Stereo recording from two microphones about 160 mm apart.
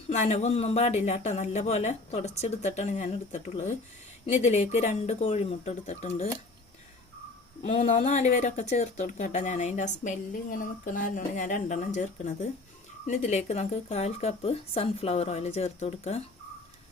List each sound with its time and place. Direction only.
0.1 s a woman's voice: 45° left (ahead or behind)
7.6 s a woman's voice: 45° left (ahead or behind)